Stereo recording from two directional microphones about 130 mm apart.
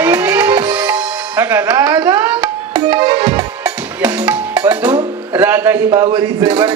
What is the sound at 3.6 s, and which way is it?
Music, 10° right (ahead or behind).